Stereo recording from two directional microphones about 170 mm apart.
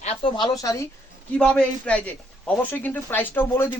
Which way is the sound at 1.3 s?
5° left (ahead or behind).